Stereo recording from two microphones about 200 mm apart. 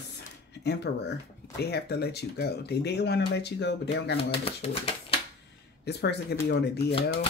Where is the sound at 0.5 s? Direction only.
55° left (ahead or behind).